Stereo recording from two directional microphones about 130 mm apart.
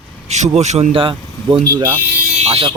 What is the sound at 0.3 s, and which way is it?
Speech, 60° right (ahead or behind).